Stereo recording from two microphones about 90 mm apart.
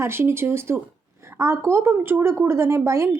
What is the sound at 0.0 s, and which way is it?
Speech, 25° right (ahead or behind).